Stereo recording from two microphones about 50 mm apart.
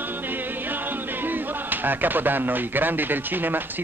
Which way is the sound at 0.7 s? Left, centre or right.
Right.